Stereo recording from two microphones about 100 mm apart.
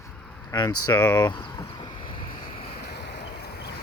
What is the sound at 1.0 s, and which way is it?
Speech, 25° left (ahead or behind).